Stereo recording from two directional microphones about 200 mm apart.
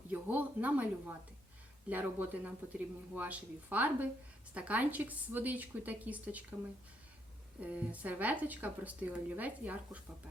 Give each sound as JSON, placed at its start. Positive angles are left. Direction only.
{"t": 0.1, "sound": "speech", "side_deg": -10}
{"t": 7.6, "sound": "speech", "side_deg": -5}